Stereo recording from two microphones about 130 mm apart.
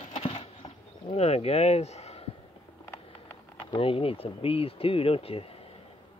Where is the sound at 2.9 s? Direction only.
20° left (ahead or behind).